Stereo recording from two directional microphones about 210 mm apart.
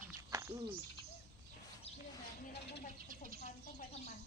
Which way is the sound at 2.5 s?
55° left (ahead or behind).